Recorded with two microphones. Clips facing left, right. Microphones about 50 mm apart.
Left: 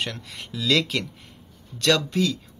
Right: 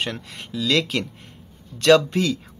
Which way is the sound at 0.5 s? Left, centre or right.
Centre.